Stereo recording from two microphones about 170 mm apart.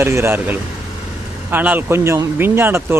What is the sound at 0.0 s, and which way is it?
Speech, 15° right (ahead or behind).